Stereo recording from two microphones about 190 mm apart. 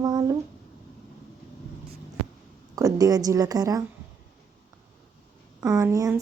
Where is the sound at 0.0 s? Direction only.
20° right (ahead or behind).